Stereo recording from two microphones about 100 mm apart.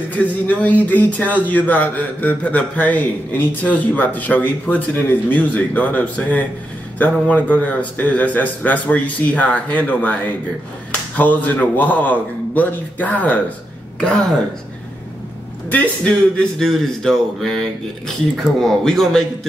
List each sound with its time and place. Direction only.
0.1 s a man's voice: 15° left (ahead or behind)
11.1 s a man's voice: 15° left (ahead or behind)
15.7 s speech: 15° left (ahead or behind)